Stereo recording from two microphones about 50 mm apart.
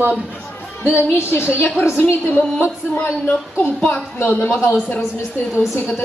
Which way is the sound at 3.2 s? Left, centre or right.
Left.